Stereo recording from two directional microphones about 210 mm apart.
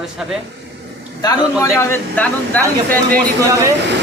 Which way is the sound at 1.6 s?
10° left (ahead or behind).